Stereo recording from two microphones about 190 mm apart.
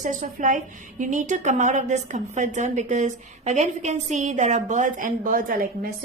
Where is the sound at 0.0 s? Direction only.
40° right (ahead or behind).